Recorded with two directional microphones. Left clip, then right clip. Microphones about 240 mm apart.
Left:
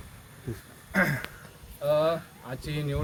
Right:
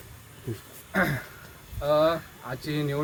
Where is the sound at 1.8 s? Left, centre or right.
Centre.